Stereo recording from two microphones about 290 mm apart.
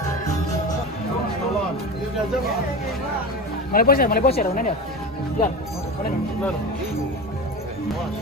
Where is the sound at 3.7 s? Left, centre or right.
Left.